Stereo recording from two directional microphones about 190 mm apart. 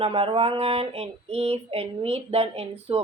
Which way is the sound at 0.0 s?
30° right (ahead or behind).